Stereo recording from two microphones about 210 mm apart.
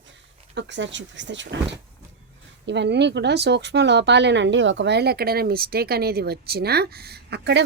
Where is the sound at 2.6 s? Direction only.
55° right (ahead or behind).